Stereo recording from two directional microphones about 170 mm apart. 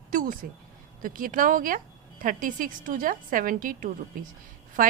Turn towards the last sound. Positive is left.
turn(degrees=-55)  # may be behind; listen again after turning